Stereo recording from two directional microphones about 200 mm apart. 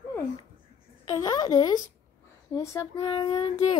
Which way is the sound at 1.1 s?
20° left (ahead or behind).